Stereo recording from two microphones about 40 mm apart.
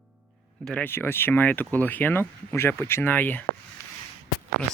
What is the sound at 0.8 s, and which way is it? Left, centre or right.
Speech, left.